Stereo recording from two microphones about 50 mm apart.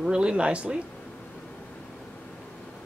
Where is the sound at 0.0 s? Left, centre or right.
Centre.